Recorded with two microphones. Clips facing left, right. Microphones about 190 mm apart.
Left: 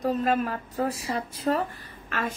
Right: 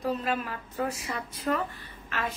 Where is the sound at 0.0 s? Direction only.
45° left (ahead or behind).